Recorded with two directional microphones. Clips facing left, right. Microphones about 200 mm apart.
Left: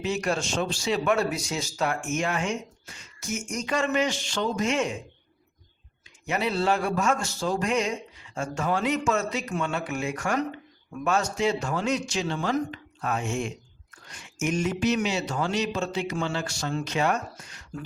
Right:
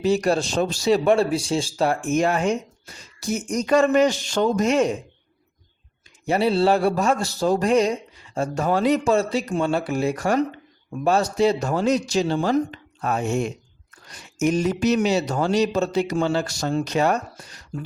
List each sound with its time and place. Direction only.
0.0 s a man's voice: 35° right (ahead or behind)
6.2 s a man's voice: 30° right (ahead or behind)